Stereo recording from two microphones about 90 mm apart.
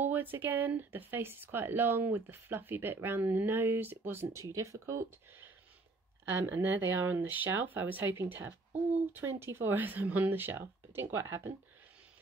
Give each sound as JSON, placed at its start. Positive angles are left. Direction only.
{"t": 0.0, "sound": "speech", "side_deg": -20}
{"t": 6.2, "sound": "speech", "side_deg": -25}